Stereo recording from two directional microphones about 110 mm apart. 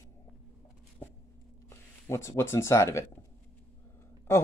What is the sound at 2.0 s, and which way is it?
Speech, 25° left (ahead or behind).